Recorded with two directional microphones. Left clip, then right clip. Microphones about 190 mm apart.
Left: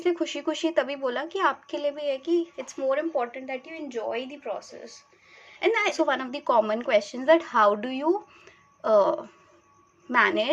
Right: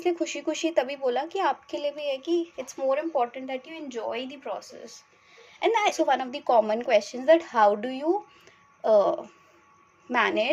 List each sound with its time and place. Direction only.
0.0 s a woman's voice: 20° left (ahead or behind)